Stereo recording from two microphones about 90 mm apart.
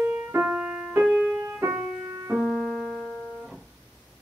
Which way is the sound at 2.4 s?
10° left (ahead or behind).